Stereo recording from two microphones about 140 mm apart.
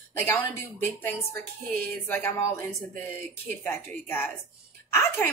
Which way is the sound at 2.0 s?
15° left (ahead or behind).